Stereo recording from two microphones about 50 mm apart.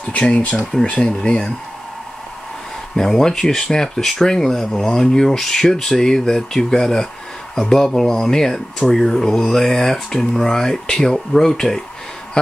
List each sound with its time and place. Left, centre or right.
0.2 s speech: left
3.0 s speech: centre